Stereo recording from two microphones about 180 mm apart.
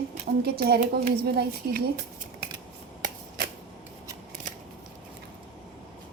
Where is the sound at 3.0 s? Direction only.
50° right (ahead or behind).